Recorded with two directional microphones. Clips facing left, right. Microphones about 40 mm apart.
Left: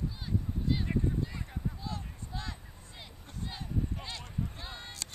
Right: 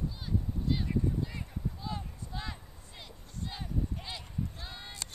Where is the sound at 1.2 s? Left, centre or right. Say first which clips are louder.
Even; centre.